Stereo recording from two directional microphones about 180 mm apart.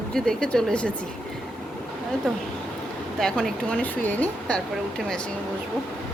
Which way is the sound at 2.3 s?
5° left (ahead or behind).